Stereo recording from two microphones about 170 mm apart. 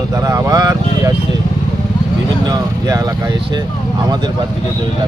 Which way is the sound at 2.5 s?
25° right (ahead or behind).